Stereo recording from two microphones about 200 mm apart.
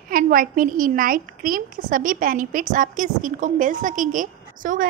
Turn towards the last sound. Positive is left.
turn(degrees=-40)  # may be behind; listen again after turning